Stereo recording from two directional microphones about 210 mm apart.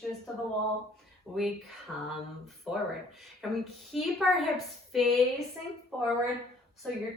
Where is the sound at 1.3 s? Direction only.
Centre (ahead or behind).